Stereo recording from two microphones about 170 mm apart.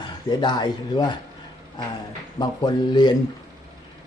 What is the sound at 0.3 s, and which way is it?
Speech, 25° left (ahead or behind).